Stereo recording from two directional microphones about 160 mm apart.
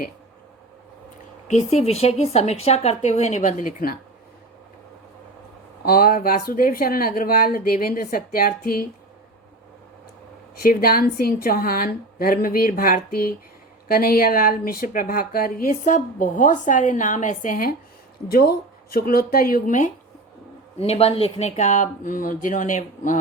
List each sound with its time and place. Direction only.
1.5 s a woman's voice: 45° left (ahead or behind)
5.8 s a woman's voice: 70° left (ahead or behind)
10.6 s a woman's voice: 70° left (ahead or behind)
18.3 s speech: 75° left (ahead or behind); by 19.9 s 55° left (ahead or behind)
20.7 s speech: 40° left (ahead or behind)